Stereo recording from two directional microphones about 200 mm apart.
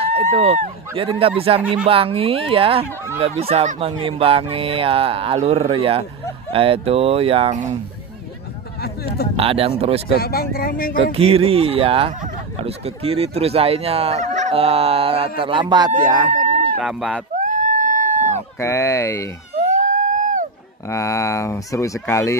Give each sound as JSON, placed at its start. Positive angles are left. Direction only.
{"t": 0.0, "sound": "speech", "side_deg": -30}
{"t": 8.8, "sound": "speech", "side_deg": 50}
{"t": 9.4, "sound": "speech", "side_deg": -30}
{"t": 10.1, "sound": "speech", "side_deg": 50}
{"t": 11.1, "sound": "speech", "side_deg": -30}
{"t": 16.8, "sound": "speech", "side_deg": 0}
{"t": 17.4, "sound": "a sound", "side_deg": -40}
{"t": 18.6, "sound": "speech", "side_deg": 15}
{"t": 19.5, "sound": "a sound", "side_deg": -35}
{"t": 20.9, "sound": "speech", "side_deg": 15}